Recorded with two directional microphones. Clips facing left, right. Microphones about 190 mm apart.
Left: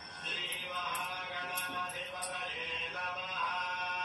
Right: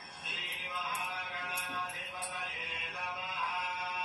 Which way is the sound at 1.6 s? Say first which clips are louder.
Even; 10° right (ahead or behind).